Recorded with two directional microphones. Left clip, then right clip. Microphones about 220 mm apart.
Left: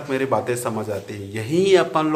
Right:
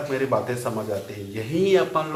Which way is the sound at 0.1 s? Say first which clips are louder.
Left 4 dB; 50° left (ahead or behind).